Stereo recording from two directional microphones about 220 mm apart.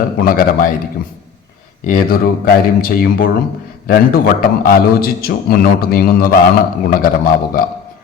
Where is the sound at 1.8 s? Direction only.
40° left (ahead or behind).